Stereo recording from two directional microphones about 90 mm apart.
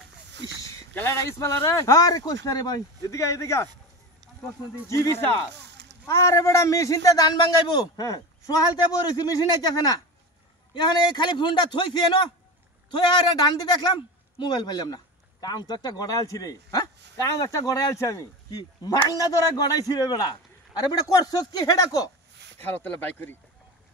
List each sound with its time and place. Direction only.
0.9 s speech: 30° left (ahead or behind)
4.8 s speech: 35° left (ahead or behind)
10.7 s a man's voice: 55° left (ahead or behind)
13.4 s a man's voice: 55° left (ahead or behind)
22.6 s speech: 20° left (ahead or behind)